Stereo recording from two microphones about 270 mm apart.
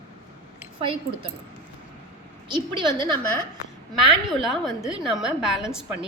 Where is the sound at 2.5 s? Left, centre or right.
Centre.